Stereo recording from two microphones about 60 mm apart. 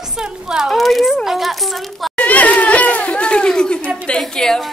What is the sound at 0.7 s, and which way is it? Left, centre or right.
Speech, centre.